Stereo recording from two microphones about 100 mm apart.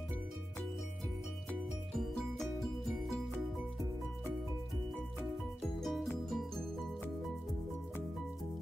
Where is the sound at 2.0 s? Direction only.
5° left (ahead or behind).